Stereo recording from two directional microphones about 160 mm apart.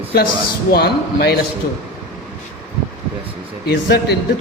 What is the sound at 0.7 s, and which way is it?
Speech, 80° left.